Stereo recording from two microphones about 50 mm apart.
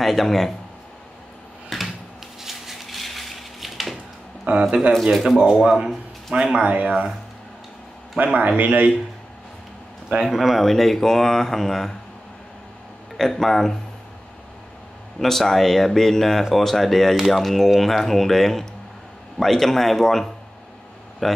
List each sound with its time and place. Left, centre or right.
0.0 s speech: centre
1.7 s a sound: centre
4.5 s speech: right
5.1 s speech: centre
5.6 s speech: centre
8.2 s speech: right
10.2 s speech: centre
13.2 s speech: centre
15.1 s speech: centre